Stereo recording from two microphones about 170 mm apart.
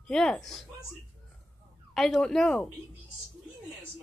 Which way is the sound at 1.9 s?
Centre (ahead or behind).